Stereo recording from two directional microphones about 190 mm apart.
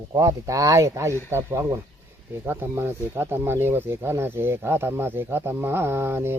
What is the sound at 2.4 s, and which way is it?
Speech, 10° right (ahead or behind).